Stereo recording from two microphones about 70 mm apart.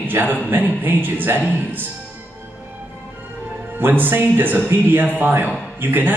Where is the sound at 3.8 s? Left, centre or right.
Right.